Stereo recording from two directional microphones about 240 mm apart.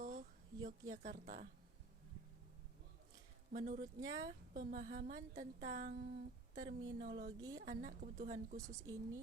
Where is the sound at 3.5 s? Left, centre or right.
Right.